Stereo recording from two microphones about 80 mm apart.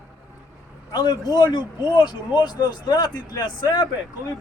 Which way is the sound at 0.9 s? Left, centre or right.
Left.